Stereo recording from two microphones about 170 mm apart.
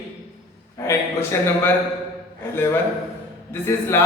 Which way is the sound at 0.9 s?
15° left (ahead or behind).